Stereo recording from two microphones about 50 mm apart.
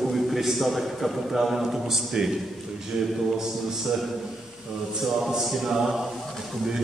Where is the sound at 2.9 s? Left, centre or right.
Centre.